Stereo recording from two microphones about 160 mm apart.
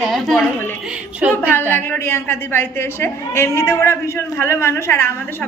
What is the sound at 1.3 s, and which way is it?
A woman's voice, 15° left (ahead or behind).